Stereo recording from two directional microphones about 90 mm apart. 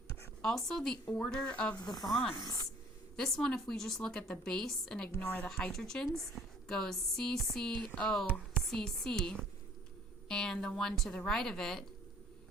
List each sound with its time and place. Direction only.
0.4 s a woman's voice: 5° left (ahead or behind)
1.8 s speech: 50° left (ahead or behind)
3.2 s a woman's voice: 5° left (ahead or behind)
5.1 s speech: 25° left (ahead or behind)
5.7 s a woman's voice: 5° left (ahead or behind)